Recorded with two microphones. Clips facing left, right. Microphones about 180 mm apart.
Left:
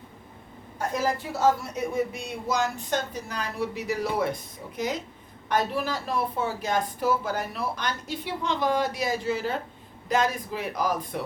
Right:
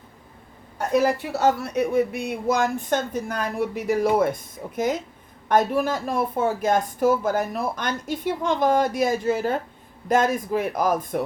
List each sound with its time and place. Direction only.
0.9 s speech: 70° right (ahead or behind); by 11.2 s 50° right (ahead or behind)